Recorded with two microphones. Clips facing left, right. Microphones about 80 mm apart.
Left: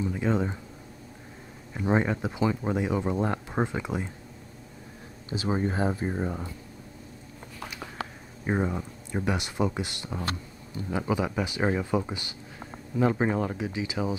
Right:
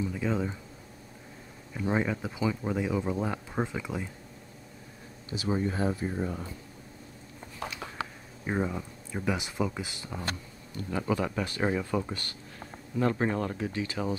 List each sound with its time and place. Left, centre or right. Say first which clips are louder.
0.0 s speech: left 3 dB; centre
1.7 s speech: left 3 dB; centre
5.3 s speech: left 2 dB; left
8.5 s speech: left 3 dB; centre
10.7 s speech: left 1 dB; centre